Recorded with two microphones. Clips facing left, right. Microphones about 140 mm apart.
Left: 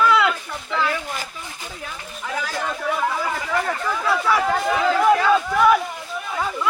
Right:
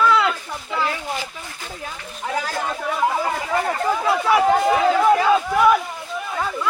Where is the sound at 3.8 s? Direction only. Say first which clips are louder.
Right 2 dB; 25° right (ahead or behind).